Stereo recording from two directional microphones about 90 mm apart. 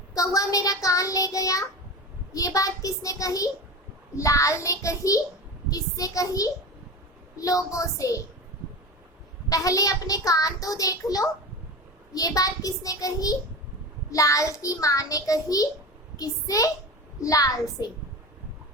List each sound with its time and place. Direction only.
0.1 s a child's voice: 40° left (ahead or behind)
9.5 s a child's voice: 40° left (ahead or behind)